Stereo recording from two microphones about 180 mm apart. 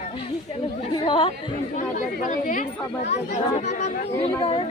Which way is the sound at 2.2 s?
45° left (ahead or behind).